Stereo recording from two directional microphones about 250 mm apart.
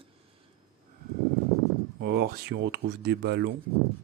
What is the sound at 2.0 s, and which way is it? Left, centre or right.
Speech, right.